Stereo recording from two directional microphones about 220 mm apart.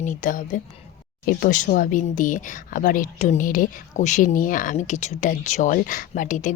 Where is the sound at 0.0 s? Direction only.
35° left (ahead or behind).